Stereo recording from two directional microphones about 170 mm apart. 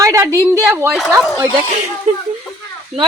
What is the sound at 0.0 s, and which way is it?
Speech, 20° right (ahead or behind).